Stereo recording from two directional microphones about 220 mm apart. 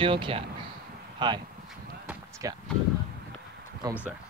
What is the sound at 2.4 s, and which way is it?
Speech, 15° right (ahead or behind).